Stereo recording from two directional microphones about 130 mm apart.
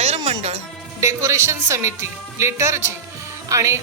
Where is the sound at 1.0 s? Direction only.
25° right (ahead or behind).